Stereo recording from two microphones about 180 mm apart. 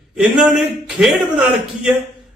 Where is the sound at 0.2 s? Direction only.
5° right (ahead or behind).